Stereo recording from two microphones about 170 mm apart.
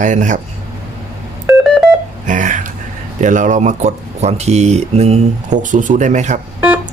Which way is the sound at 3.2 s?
45° right (ahead or behind).